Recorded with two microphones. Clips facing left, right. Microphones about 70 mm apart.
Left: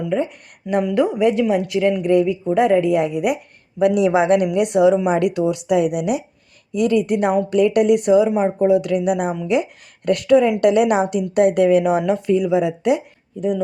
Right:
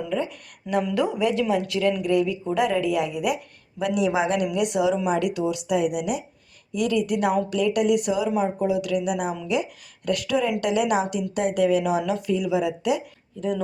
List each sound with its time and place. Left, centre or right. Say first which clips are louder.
0.1 s speech: left 6 dB; left
3.8 s a woman's voice: left 7 dB; left
4.9 s speech: left 5 dB; left
5.2 s a woman's voice: left 6 dB; left